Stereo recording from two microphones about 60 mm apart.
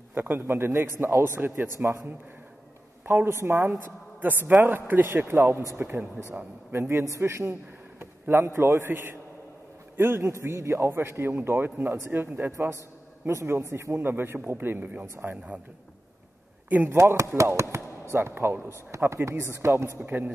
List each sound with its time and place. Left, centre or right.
0.1 s a man's voice: right
3.4 s a man's voice: right
3.8 s a woman's voice: right
10.2 s a man's voice: right
12.5 s a man's voice: right
13.9 s a man's voice: right
16.6 s speech: right
16.9 s a man's voice: right
18.9 s a man's voice: right